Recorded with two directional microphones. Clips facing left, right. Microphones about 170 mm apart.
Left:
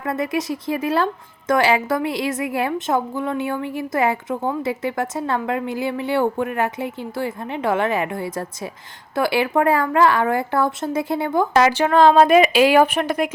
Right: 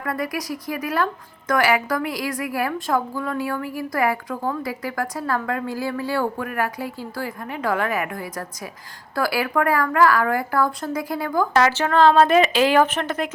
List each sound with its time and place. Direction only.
0.0 s speech: 25° left (ahead or behind)